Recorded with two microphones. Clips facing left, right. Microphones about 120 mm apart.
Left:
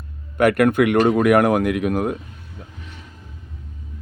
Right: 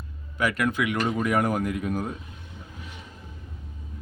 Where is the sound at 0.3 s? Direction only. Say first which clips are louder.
Left 10 dB; 60° left (ahead or behind).